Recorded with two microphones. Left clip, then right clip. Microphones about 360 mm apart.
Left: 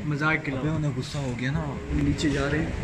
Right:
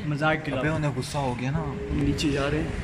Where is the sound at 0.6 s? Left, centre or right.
Right.